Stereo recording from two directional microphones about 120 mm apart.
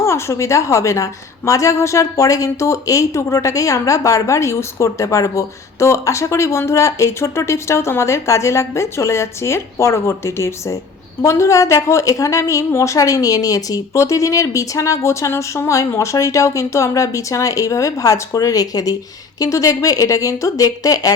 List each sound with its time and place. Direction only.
0.0 s a woman's voice: 25° left (ahead or behind)